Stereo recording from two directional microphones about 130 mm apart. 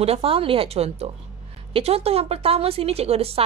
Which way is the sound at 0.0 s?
50° right (ahead or behind).